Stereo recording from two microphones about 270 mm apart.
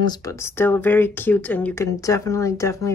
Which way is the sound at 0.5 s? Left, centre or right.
Centre.